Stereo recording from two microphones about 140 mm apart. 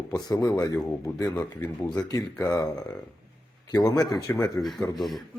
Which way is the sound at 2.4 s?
25° left (ahead or behind).